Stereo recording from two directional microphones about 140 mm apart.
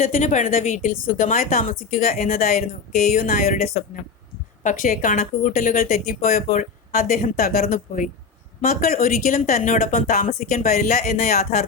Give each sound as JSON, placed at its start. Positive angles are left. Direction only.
{"t": 0.0, "sound": "a woman's voice", "side_deg": 60}
{"t": 9.0, "sound": "a woman's voice", "side_deg": 90}